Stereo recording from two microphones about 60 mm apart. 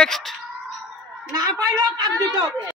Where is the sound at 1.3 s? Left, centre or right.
Right.